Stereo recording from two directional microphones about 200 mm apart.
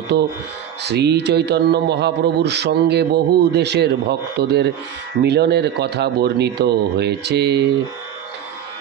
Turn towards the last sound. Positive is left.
turn(degrees=-55)  # may be behind; listen again after turning